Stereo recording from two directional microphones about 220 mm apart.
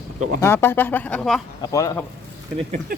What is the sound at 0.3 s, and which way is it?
Speech, 10° left (ahead or behind).